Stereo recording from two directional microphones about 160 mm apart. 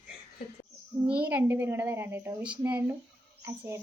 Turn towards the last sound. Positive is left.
turn(degrees=-15)  # may be behind; listen again after turning